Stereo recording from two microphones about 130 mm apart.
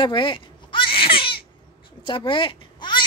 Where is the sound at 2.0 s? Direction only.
40° left (ahead or behind).